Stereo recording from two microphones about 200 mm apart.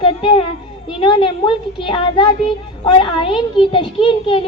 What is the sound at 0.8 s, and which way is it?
A child's voice, 25° left (ahead or behind).